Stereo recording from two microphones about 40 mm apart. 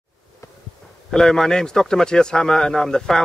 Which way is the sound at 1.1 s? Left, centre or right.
Centre.